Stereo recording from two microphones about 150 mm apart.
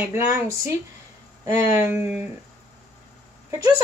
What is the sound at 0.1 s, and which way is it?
Speech, 15° right (ahead or behind).